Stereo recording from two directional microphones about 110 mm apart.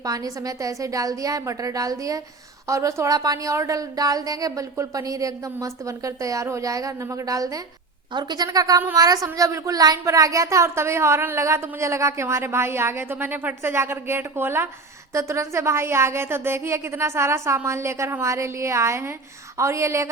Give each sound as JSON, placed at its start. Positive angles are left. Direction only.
{"t": 0.0, "sound": "a woman's voice", "side_deg": -35}